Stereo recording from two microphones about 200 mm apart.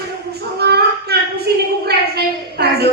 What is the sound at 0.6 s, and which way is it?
Child singing, 55° right (ahead or behind).